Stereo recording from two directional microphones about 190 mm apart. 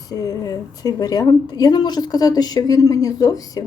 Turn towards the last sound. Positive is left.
turn(degrees=20)  # may be behind; listen again after turning